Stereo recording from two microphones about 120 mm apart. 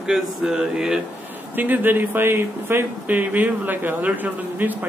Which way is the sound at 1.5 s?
15° right (ahead or behind).